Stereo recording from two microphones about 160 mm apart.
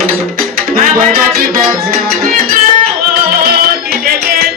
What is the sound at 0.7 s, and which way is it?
Music, 60° right (ahead or behind).